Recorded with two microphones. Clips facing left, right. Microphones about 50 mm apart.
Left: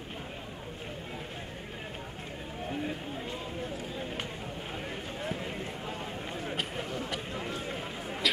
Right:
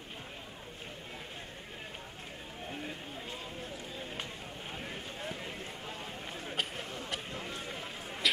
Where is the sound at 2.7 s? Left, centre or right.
Centre.